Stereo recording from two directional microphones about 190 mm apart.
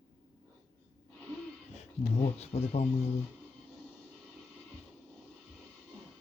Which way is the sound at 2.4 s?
35° left (ahead or behind).